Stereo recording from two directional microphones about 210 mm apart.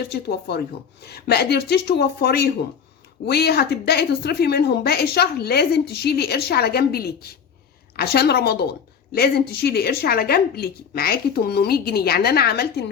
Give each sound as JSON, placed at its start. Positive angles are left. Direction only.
{"t": 0.1, "sound": "speech", "side_deg": 50}